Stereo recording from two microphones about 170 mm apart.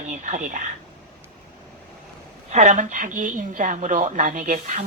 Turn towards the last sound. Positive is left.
turn(degrees=-50)  # may be behind; listen again after turning